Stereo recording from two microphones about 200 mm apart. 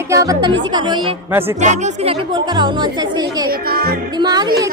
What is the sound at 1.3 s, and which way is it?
Speech, 10° right (ahead or behind).